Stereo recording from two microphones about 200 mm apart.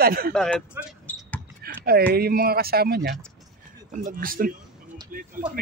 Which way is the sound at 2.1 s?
50° right (ahead or behind).